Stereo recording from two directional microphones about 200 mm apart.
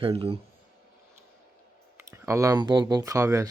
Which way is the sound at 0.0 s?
30° right (ahead or behind).